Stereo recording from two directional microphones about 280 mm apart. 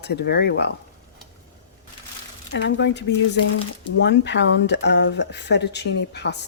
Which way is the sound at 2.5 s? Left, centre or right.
Left.